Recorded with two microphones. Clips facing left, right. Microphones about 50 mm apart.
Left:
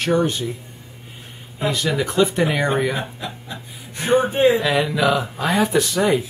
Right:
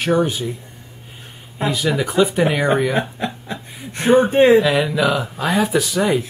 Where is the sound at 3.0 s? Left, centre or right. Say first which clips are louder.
Right 6 dB; right.